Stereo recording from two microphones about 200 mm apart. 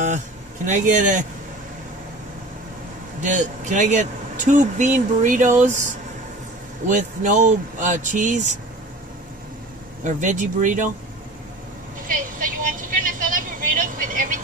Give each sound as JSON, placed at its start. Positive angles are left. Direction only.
{"t": 0.7, "sound": "speech", "side_deg": -40}
{"t": 3.2, "sound": "speech", "side_deg": -40}
{"t": 10.0, "sound": "speech", "side_deg": -40}
{"t": 12.1, "sound": "vehicle", "side_deg": -45}